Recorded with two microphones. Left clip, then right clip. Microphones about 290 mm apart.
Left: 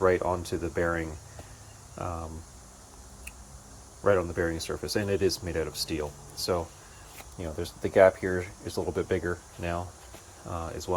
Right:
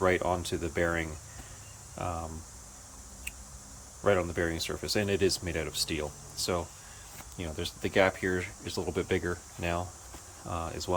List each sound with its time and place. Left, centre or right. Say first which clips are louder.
0.0 s speech: left 2 dB; centre
4.0 s speech: left 2 dB; centre
7.9 s speech: left 6 dB; centre